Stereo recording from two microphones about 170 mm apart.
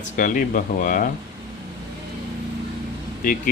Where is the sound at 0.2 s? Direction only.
50° left (ahead or behind).